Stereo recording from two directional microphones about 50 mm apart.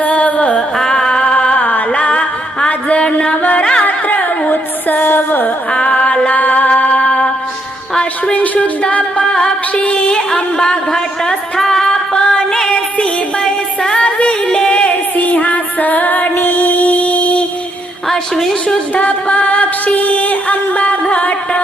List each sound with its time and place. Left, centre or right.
0.0 s music: left
0.8 s music: centre; by 5.5 s left
5.7 s music: left
7.9 s a sound: left
9.2 s music: centre
18.1 s a sound: centre
18.9 s music: left